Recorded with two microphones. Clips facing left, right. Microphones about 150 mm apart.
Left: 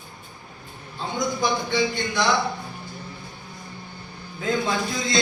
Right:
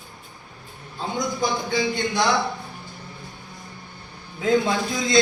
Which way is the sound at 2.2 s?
Centre (ahead or behind).